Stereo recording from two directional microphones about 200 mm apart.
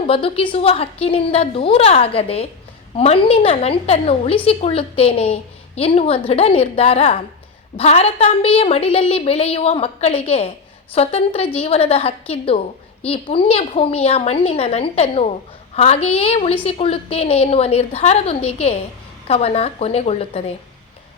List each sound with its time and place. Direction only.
0.1 s a woman's voice: 30° left (ahead or behind)